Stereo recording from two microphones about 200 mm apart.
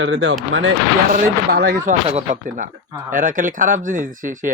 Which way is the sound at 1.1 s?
50° right (ahead or behind).